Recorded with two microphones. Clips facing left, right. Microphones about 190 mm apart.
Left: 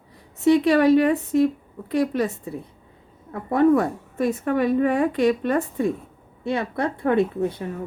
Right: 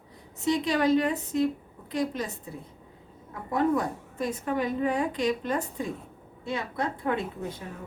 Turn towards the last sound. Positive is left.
turn(degrees=60)  # may be behind; listen again after turning